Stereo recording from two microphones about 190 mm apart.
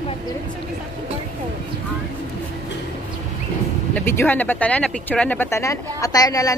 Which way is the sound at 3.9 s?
10° left (ahead or behind).